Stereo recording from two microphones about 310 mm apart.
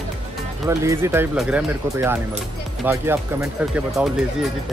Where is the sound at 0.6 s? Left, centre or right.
Centre.